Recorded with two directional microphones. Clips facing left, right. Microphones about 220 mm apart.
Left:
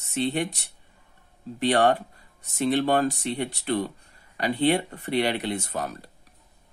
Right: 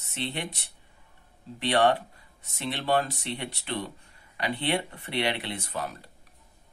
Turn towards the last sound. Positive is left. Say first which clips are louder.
# left 5 dB
turn(degrees=45)  # may be behind; listen again after turning